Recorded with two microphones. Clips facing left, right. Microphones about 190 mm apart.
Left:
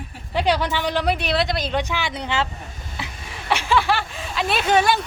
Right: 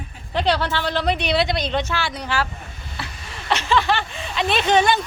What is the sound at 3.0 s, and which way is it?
Speech, 10° left (ahead or behind).